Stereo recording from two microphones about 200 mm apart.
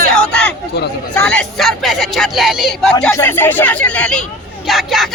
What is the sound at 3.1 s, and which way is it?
Speech, 10° left (ahead or behind).